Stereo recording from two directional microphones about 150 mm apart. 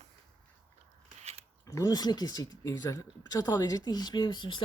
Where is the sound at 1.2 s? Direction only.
45° right (ahead or behind).